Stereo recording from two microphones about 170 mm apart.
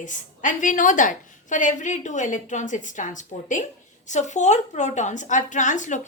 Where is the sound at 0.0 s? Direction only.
50° left (ahead or behind).